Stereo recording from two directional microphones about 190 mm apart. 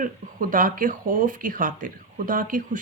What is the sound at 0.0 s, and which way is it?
A woman's voice, 45° right (ahead or behind).